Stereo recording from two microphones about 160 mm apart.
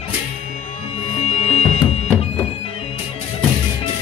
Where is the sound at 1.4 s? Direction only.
40° left (ahead or behind).